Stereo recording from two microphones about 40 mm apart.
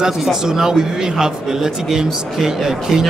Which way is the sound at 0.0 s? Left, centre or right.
Centre.